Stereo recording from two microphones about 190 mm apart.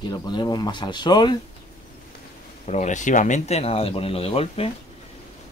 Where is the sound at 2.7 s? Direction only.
40° left (ahead or behind).